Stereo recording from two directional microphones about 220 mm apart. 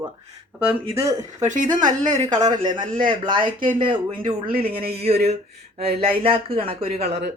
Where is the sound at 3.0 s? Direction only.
20° right (ahead or behind).